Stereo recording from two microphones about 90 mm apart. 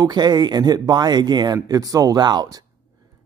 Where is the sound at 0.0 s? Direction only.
50° right (ahead or behind).